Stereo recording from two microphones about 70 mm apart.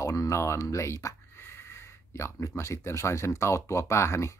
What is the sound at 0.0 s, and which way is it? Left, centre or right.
Speech, left.